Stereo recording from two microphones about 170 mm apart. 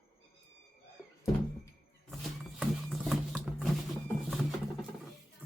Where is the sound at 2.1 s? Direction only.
Centre (ahead or behind).